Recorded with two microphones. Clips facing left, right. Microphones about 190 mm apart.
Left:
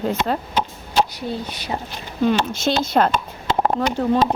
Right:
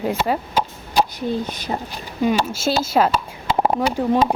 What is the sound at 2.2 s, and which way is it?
Speech, 10° right (ahead or behind).